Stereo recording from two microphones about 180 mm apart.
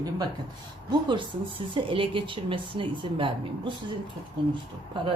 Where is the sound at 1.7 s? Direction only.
30° right (ahead or behind).